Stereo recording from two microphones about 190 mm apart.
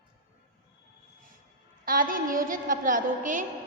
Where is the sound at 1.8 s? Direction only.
45° right (ahead or behind).